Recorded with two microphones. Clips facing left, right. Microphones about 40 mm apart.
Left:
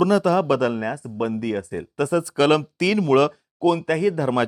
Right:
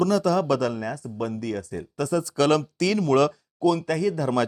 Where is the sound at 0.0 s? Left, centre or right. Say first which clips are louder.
Left 3 dB; left.